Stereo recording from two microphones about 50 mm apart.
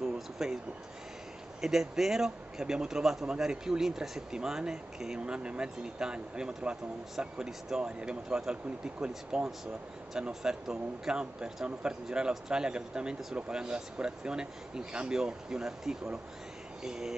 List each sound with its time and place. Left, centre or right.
0.0 s speech: centre
1.6 s speech: centre